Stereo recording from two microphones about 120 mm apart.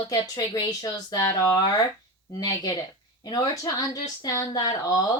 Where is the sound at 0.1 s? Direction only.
30° left (ahead or behind).